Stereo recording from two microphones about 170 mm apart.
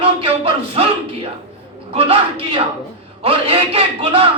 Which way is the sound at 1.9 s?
35° right (ahead or behind).